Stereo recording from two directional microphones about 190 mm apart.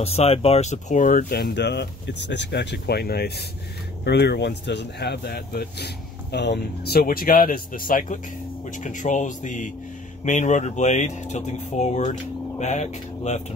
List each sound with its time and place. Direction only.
0.0 s speech: 30° left (ahead or behind)